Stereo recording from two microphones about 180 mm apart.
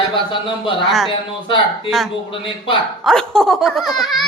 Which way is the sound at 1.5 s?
30° left (ahead or behind).